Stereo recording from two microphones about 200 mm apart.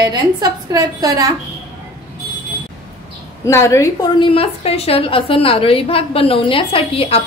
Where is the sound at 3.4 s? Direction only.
15° left (ahead or behind).